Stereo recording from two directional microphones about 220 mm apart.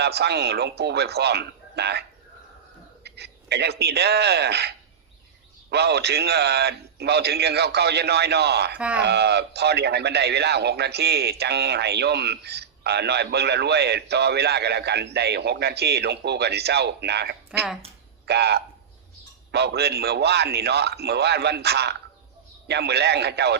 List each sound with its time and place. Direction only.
0.0 s a man's voice: 50° right (ahead or behind)
5.7 s a man's voice: 50° right (ahead or behind)